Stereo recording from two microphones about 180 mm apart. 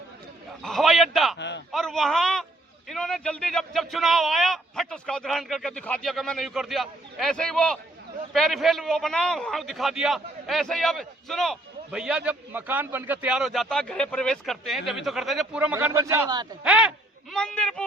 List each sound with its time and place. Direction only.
0.6 s a man's voice: centre (ahead or behind)
1.4 s a man's voice: 75° left (ahead or behind)
1.7 s a man's voice: centre (ahead or behind); by 16.6 s 25° right (ahead or behind)
16.6 s a man's voice: 5° right (ahead or behind)
17.3 s a man's voice: 5° left (ahead or behind)